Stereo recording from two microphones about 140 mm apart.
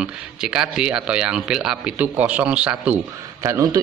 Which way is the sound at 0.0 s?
5° right (ahead or behind).